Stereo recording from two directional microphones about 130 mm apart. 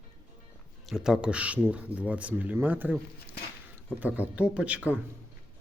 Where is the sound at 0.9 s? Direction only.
5° right (ahead or behind).